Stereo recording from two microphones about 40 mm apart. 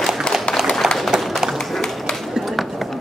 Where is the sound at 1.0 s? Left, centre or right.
Centre.